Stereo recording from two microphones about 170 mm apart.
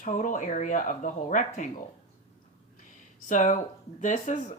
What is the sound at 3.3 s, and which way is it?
Speech, 50° left (ahead or behind).